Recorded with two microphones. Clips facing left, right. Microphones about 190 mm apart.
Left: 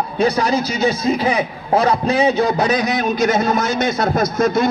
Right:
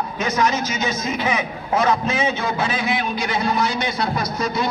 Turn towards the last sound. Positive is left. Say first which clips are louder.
# left 7 dB
turn(degrees=50)  # may be behind; listen again after turning